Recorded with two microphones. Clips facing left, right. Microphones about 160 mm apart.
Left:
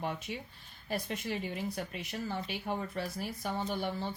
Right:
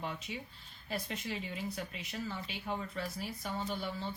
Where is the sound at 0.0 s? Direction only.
55° left (ahead or behind).